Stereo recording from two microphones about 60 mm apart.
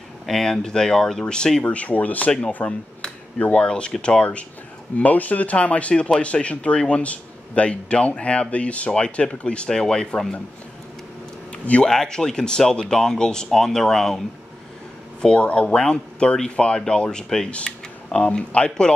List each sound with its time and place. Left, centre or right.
0.3 s speech: centre
11.5 s speech: left
11.9 s speech: centre
15.2 s speech: centre